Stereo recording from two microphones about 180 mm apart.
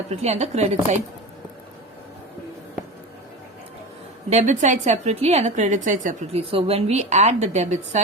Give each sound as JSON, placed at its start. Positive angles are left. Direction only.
{"t": 0.1, "sound": "a woman's voice", "side_deg": -35}
{"t": 4.3, "sound": "a woman's voice", "side_deg": -40}
{"t": 6.4, "sound": "a woman's voice", "side_deg": -30}